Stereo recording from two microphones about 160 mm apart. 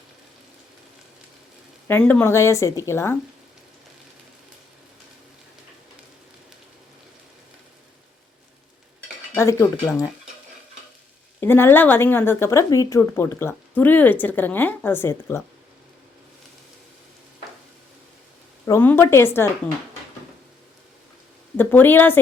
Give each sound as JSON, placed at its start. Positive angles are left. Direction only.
{"t": 1.9, "sound": "speech", "side_deg": 10}
{"t": 9.3, "sound": "speech", "side_deg": 15}
{"t": 11.3, "sound": "speech", "side_deg": 15}
{"t": 18.6, "sound": "speech", "side_deg": 15}
{"t": 21.6, "sound": "speech", "side_deg": 10}